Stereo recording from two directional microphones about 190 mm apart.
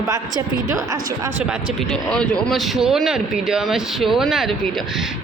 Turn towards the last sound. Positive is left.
turn(degrees=0)  # may be behind; listen again after turning